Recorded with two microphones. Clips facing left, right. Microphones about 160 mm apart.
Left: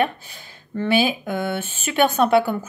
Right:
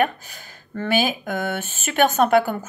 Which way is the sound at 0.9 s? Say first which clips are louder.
Left 2 dB; 45° right (ahead or behind).